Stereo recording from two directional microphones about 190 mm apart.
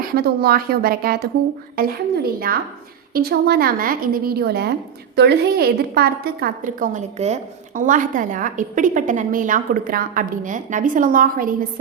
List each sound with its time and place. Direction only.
0.0 s a woman's voice: 50° right (ahead or behind)